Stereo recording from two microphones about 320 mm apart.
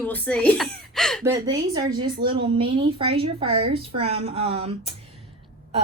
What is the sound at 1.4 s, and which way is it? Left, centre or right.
A woman's voice, centre.